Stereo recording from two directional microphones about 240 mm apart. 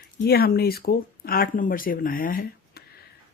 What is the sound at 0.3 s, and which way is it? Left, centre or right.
Speech, left.